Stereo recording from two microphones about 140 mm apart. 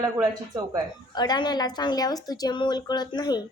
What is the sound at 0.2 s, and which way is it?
Speech, 25° right (ahead or behind).